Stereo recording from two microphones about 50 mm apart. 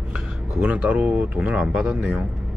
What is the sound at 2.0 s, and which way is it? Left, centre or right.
Speech, centre.